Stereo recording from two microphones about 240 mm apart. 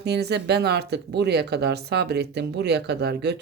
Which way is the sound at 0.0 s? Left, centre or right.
Right.